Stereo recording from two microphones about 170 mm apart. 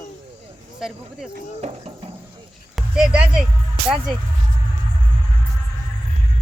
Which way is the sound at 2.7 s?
5° right (ahead or behind).